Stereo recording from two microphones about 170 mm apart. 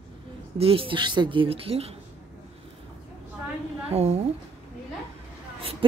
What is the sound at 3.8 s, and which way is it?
Speech, 40° right (ahead or behind).